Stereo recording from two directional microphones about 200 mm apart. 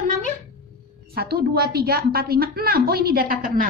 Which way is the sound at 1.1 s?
50° right (ahead or behind).